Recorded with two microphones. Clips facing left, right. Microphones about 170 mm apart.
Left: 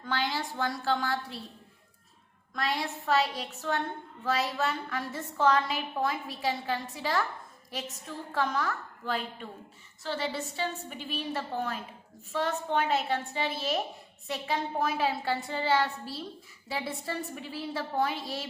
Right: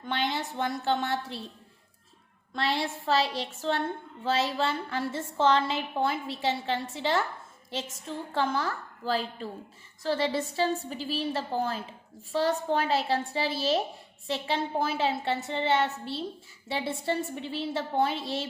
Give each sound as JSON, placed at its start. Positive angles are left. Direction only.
{"t": 0.0, "sound": "a woman's voice", "side_deg": -20}
{"t": 2.5, "sound": "a woman's voice", "side_deg": -30}